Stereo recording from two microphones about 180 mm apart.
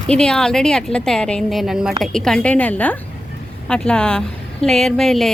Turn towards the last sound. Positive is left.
turn(degrees=0)  # may be behind; listen again after turning